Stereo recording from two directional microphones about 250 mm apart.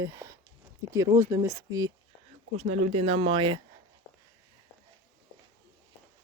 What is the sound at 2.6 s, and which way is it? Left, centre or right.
Speech, right.